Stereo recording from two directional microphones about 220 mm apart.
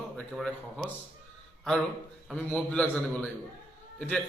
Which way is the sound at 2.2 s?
5° left (ahead or behind).